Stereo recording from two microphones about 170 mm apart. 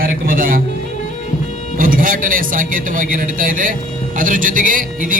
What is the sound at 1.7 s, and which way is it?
A man's voice, 55° right (ahead or behind).